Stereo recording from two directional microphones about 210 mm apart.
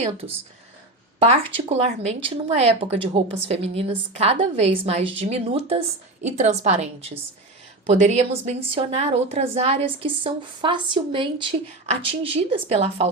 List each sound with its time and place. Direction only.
1.2 s a woman's voice: 25° right (ahead or behind)